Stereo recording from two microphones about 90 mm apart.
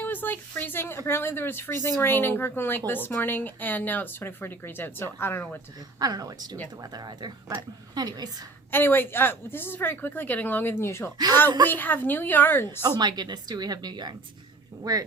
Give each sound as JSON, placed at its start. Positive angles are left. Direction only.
{"t": 0.0, "sound": "speech", "side_deg": 20}
{"t": 6.0, "sound": "a woman's voice", "side_deg": -45}
{"t": 8.7, "sound": "speech", "side_deg": 25}
{"t": 13.0, "sound": "a woman's voice", "side_deg": -50}